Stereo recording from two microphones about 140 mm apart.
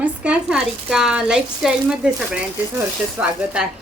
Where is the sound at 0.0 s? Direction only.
5° right (ahead or behind).